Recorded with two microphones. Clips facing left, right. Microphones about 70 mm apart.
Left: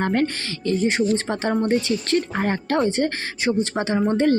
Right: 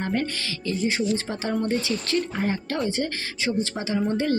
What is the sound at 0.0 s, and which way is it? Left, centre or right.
A woman's voice, left.